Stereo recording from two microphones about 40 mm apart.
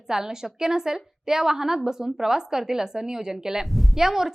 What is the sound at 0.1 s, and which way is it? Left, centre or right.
A woman's voice, centre.